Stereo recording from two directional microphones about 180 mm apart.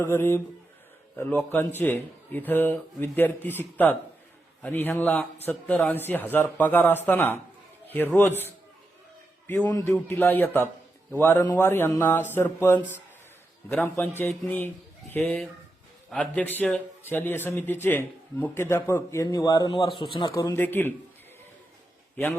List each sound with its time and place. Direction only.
0.0 s a man's voice: 10° left (ahead or behind)
4.6 s a man's voice: 10° left (ahead or behind)
9.6 s a man's voice: 20° left (ahead or behind)
20.4 s a man's voice: 15° left (ahead or behind)